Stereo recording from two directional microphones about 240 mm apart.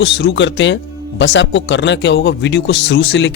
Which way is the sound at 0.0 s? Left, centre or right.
Left.